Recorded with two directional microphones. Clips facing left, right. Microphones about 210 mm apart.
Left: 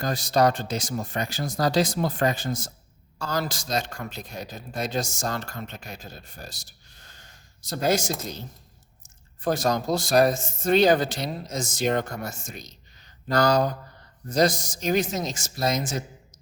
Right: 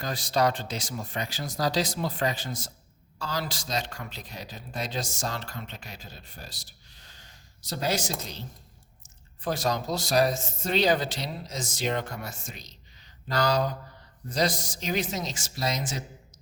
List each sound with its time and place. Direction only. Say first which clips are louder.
0.0 s a man's voice: left 4 dB; 45° left (ahead or behind)